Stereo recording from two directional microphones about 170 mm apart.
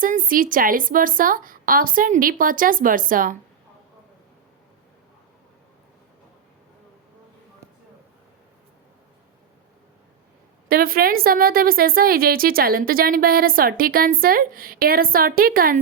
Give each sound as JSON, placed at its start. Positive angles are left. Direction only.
{"t": 0.0, "sound": "a woman's voice", "side_deg": -55}
{"t": 10.7, "sound": "a woman's voice", "side_deg": -60}